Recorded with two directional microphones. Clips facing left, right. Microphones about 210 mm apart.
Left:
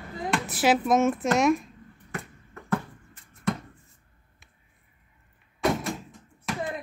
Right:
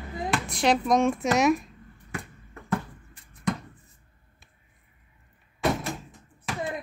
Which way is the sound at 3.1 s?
15° right (ahead or behind).